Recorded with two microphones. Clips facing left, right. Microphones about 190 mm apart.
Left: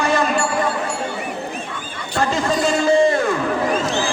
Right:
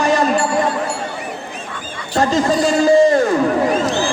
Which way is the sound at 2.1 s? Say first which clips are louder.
Right 4 dB; 40° right (ahead or behind).